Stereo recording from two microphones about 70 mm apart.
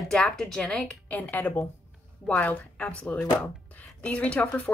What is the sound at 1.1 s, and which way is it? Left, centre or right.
A woman's voice, left.